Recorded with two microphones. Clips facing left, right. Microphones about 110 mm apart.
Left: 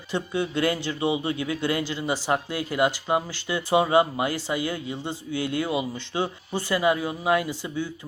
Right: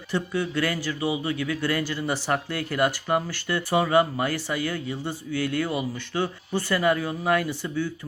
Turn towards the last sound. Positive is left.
turn(degrees=15)  # may be behind; listen again after turning